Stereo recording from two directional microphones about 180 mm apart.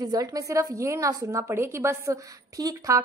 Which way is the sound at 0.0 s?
20° right (ahead or behind).